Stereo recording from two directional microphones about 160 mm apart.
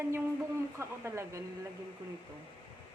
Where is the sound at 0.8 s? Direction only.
15° right (ahead or behind).